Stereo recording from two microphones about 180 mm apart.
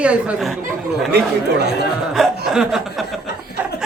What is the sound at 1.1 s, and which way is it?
Speech, 65° right (ahead or behind).